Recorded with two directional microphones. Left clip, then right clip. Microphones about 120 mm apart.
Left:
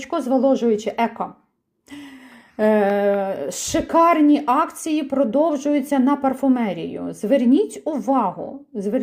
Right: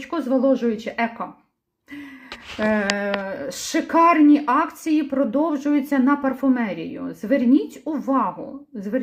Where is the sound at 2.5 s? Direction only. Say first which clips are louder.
Left 5 dB; 15° left (ahead or behind).